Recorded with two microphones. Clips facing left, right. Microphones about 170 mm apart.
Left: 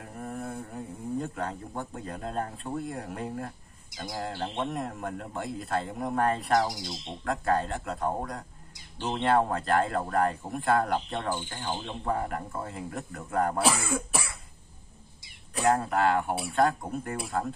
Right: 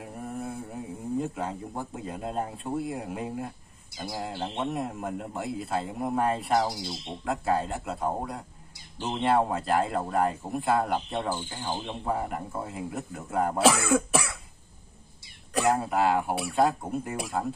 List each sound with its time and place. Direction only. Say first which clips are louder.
0.0 s mantra: right 1 dB; 5° right (ahead or behind)
1.2 s speech: right 2 dB; 5° right (ahead or behind)
13.7 s speech: right 6 dB; 85° right
15.6 s speech: even; 5° right (ahead or behind)